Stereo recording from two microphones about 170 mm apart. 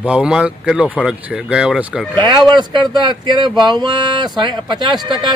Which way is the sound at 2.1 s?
25° right (ahead or behind).